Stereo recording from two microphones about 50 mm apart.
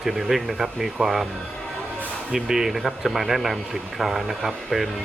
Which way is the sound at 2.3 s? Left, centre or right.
Centre.